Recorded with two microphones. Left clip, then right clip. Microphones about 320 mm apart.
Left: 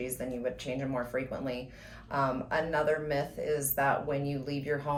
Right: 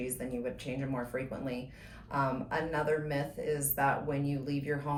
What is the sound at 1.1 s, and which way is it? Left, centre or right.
Speech, centre.